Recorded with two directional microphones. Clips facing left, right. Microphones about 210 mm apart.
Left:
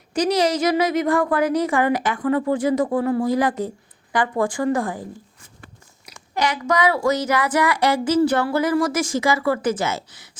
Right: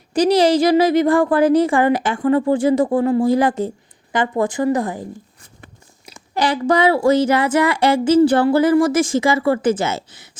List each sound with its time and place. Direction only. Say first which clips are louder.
0.1 s speech: right 5 dB; 30° right (ahead or behind)
6.1 s speech: right 4 dB; 30° right (ahead or behind)